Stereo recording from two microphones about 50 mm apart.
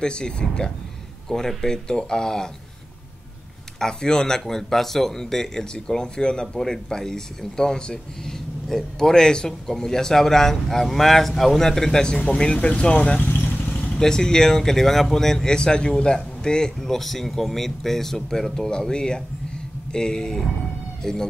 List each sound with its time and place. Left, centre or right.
0.0 s speech: centre
3.8 s speech: centre
13.4 s vehicle: left
13.9 s speech: centre